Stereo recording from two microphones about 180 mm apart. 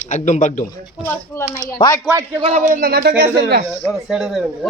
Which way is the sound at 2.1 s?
15° right (ahead or behind).